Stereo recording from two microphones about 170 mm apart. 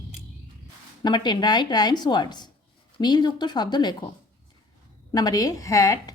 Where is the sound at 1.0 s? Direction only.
25° left (ahead or behind).